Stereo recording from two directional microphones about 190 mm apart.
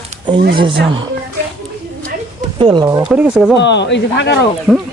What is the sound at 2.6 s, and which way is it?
Speech, 25° right (ahead or behind).